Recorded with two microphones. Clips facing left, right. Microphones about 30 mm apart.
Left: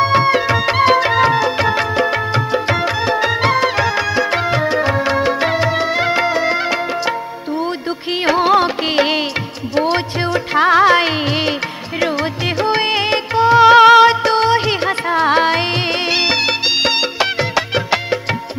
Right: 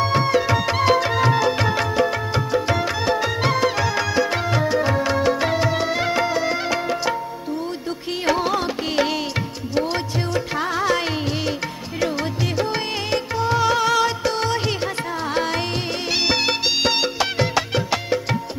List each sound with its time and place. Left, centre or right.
0.0 s music: left
8.4 s music: left
10.6 s music: left
12.0 s music: left
12.6 s music: left
16.1 s music: left